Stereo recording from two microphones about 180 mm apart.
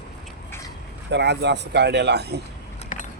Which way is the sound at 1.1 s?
70° right (ahead or behind).